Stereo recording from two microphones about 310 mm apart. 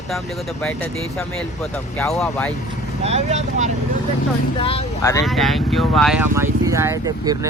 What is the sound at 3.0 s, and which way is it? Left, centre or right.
Speech, right.